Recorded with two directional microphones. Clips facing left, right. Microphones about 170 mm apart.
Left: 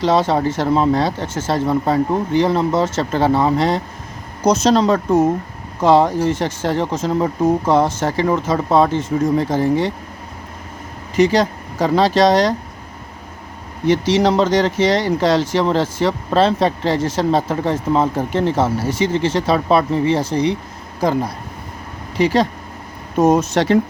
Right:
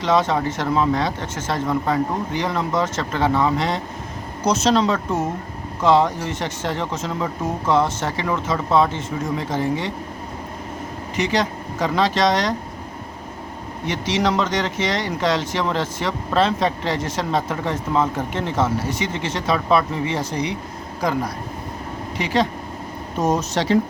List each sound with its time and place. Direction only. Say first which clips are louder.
0.0 s speech: left 3 dB; 35° left (ahead or behind)
11.2 s speech: left 7 dB; 35° left (ahead or behind)
13.8 s speech: left 7 dB; 35° left (ahead or behind)
22.2 s speech: left 5 dB; 40° left (ahead or behind)
23.2 s speech: left 6 dB; 55° left (ahead or behind)